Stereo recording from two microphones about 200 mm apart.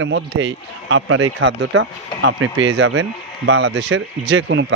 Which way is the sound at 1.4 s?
65° right (ahead or behind).